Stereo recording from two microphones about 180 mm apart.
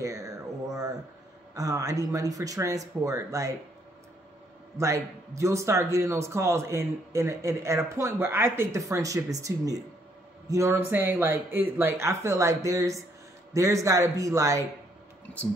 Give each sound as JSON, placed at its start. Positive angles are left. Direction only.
{"t": 0.0, "sound": "a sound", "side_deg": -20}
{"t": 1.5, "sound": "speech", "side_deg": -20}
{"t": 4.7, "sound": "a man's voice", "side_deg": -15}